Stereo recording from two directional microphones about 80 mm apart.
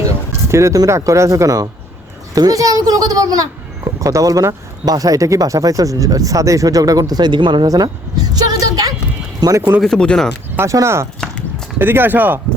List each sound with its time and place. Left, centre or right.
0.4 s speech: right
8.3 s a sound: right
9.5 s speech: right
9.8 s speech: centre
10.6 s speech: right